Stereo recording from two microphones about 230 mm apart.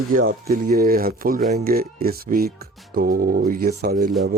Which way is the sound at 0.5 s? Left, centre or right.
Right.